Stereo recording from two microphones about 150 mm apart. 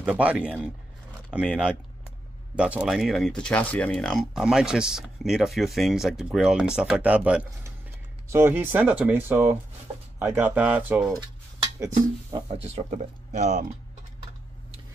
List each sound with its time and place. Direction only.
0.0 s speech: 10° right (ahead or behind)
2.5 s speech: 5° right (ahead or behind)
11.1 s a sound: 25° right (ahead or behind)
12.4 s speech: 45° right (ahead or behind)